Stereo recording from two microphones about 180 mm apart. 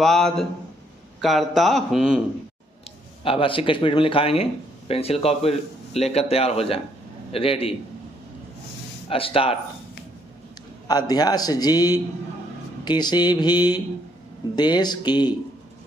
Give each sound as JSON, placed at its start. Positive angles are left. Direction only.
{"t": 0.0, "sound": "a man's voice", "side_deg": 0}
{"t": 3.3, "sound": "speech", "side_deg": 30}
{"t": 9.1, "sound": "speech", "side_deg": 30}
{"t": 10.9, "sound": "a man's voice", "side_deg": 20}